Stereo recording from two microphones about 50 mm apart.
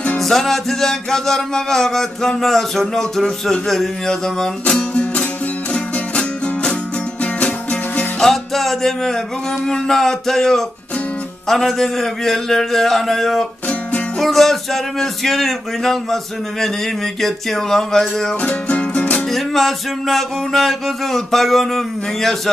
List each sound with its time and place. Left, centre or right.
0.2 s music: centre; by 7.8 s left
8.2 s music: centre
11.4 s a sound: centre
17.2 s music: centre
18.4 s music: left
19.3 s a sound: centre